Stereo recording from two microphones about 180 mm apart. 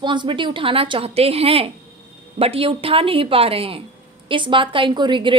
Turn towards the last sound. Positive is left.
turn(degrees=-25)  # may be behind; listen again after turning